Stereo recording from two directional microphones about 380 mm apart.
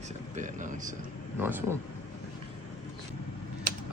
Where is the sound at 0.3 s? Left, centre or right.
Centre.